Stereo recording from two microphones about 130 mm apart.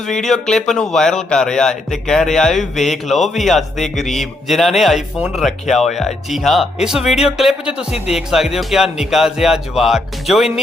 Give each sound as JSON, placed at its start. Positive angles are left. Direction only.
{"t": 0.1, "sound": "speech", "side_deg": 5}